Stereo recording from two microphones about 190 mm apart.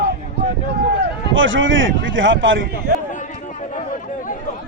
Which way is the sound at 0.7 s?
75° right (ahead or behind).